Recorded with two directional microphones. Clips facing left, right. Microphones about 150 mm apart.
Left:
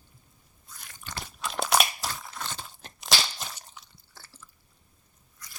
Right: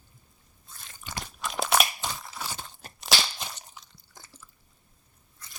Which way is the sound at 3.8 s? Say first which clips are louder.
Right 1 dB; 15° right (ahead or behind).